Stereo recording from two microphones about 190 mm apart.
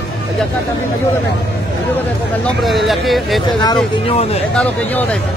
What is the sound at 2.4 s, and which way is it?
Speech, centre (ahead or behind).